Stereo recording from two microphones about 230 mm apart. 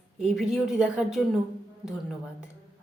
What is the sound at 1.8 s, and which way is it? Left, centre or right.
Speech, centre.